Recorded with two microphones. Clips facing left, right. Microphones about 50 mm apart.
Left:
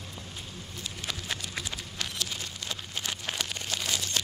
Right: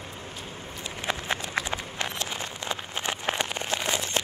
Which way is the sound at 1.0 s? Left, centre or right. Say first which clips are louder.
Right 7 dB; right.